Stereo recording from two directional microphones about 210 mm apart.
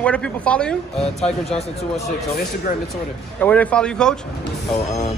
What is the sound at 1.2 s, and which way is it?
Speech, 30° left (ahead or behind).